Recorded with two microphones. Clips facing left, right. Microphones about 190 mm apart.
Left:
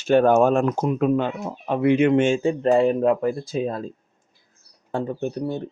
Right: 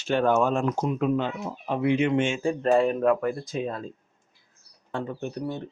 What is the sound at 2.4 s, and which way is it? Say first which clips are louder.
Speech: left 4 dB; 25° left (ahead or behind).